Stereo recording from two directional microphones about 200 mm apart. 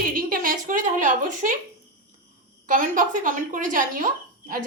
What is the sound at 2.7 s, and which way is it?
Speech, 40° right (ahead or behind).